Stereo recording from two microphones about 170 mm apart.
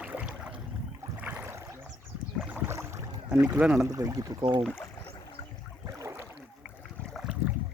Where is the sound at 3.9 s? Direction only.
20° right (ahead or behind).